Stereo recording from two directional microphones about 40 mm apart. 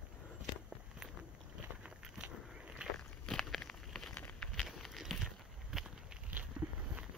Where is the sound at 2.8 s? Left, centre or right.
Right.